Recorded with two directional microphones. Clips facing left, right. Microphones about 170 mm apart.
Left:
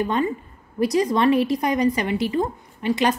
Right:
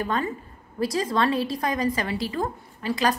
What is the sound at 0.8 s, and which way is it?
A woman's voice, 20° left (ahead or behind).